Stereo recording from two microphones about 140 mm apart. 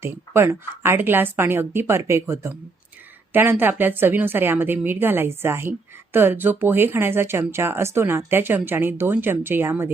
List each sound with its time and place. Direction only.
0.0 s speech: 20° right (ahead or behind)